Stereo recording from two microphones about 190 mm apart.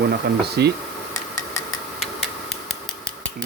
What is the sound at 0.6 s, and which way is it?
Speech, 60° right (ahead or behind).